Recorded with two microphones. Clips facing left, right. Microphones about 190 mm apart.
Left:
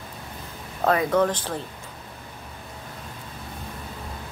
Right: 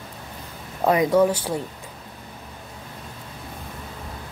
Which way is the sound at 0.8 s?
10° right (ahead or behind).